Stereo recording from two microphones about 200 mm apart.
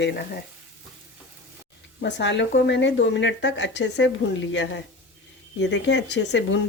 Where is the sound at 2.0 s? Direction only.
60° left (ahead or behind).